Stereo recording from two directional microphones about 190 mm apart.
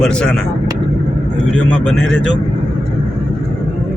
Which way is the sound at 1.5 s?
5° left (ahead or behind).